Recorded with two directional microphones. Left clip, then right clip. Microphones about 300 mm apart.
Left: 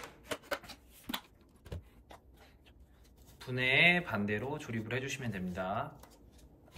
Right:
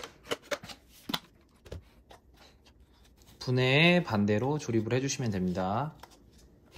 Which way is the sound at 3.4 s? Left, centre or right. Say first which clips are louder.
Right 2 dB; centre.